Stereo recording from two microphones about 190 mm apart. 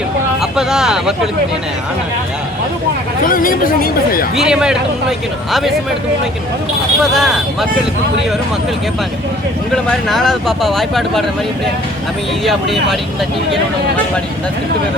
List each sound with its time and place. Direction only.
0.5 s speech: 5° right (ahead or behind)
3.2 s speech: 45° left (ahead or behind)
4.4 s speech: 5° right (ahead or behind)
7.0 s speech: centre (ahead or behind)
9.8 s speech: centre (ahead or behind)